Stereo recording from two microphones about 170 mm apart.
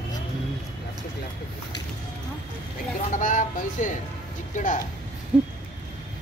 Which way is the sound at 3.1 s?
50° left (ahead or behind).